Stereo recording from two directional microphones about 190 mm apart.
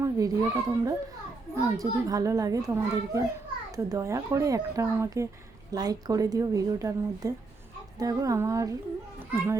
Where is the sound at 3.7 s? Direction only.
15° right (ahead or behind).